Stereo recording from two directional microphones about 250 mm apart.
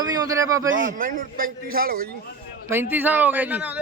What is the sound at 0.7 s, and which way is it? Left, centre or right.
Speech, right.